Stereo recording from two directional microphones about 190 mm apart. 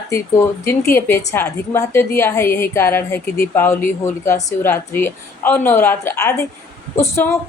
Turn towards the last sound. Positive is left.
turn(degrees=15)  # may be behind; listen again after turning